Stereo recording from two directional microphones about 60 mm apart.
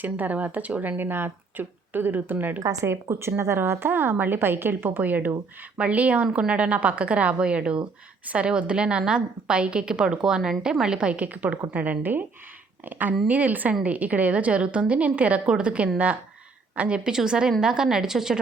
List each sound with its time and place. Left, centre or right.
0.0 s a woman's voice: right
2.6 s a woman's voice: right; by 18.3 s centre